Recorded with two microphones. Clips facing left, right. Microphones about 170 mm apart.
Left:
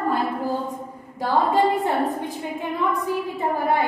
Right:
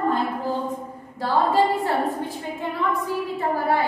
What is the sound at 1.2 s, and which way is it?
Speech, 20° left (ahead or behind).